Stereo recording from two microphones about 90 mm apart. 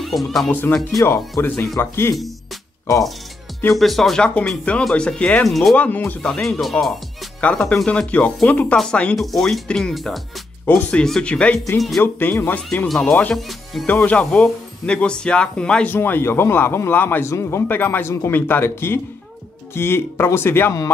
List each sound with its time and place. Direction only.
0.0 s speech: centre (ahead or behind)
0.5 s a man's voice: 20° left (ahead or behind)
3.7 s speech: centre (ahead or behind)
4.5 s speech: 15° left (ahead or behind)
5.8 s a man's voice: 20° left (ahead or behind)
6.2 s speech: 5° left (ahead or behind)
12.0 s a man's voice: 25° left (ahead or behind)
13.0 s speech: 10° left (ahead or behind)
13.8 s speech: 15° left (ahead or behind)
15.9 s a man's voice: 25° left (ahead or behind)